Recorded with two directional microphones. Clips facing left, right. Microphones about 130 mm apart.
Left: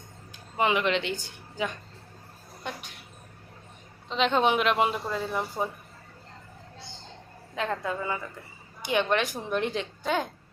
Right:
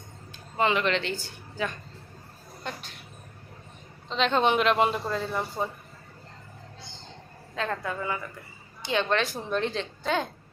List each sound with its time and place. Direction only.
0.5 s a woman's voice: 15° left (ahead or behind)
4.1 s speech: 5° left (ahead or behind)
7.5 s a woman's voice: 15° left (ahead or behind)